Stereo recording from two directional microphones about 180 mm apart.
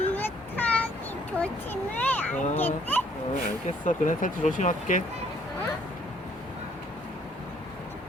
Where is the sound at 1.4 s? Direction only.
10° left (ahead or behind).